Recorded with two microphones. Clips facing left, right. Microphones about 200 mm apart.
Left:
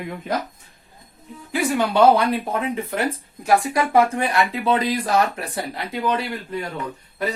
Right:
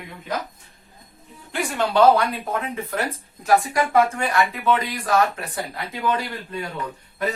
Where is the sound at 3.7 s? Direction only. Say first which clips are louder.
Left 1 dB; 30° left (ahead or behind).